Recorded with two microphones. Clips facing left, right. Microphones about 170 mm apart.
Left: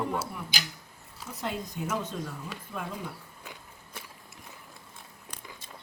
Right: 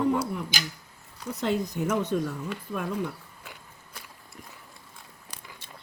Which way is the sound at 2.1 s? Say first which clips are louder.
Right 9 dB; 60° right (ahead or behind).